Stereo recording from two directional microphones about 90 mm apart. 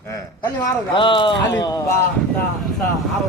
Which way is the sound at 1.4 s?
45° left (ahead or behind).